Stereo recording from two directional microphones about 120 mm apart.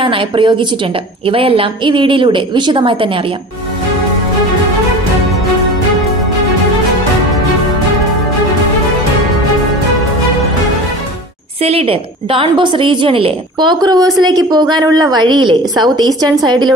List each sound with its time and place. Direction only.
0.0 s a woman's voice: 45° right (ahead or behind)
11.6 s a woman's voice: 55° right (ahead or behind); by 16.7 s 35° right (ahead or behind)